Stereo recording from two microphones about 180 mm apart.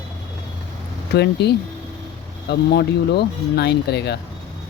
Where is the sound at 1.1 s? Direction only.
65° left (ahead or behind).